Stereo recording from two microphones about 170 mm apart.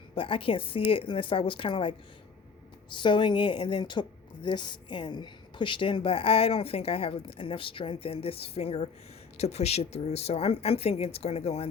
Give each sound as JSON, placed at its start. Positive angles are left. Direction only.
{"t": 0.2, "sound": "a woman's voice", "side_deg": 30}